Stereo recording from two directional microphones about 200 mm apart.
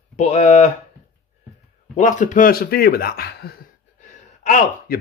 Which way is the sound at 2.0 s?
40° left (ahead or behind).